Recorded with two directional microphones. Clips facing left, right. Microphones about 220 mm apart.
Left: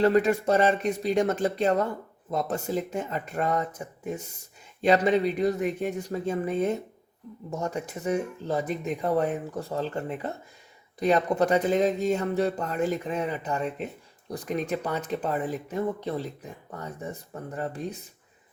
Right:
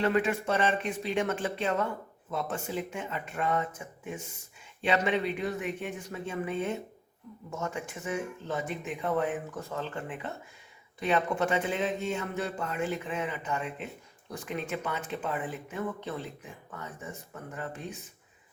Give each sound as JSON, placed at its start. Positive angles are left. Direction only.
{"t": 0.0, "sound": "speech", "side_deg": 35}